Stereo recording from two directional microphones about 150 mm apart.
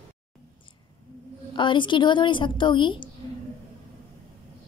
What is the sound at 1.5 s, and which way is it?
A woman's voice, 30° left (ahead or behind).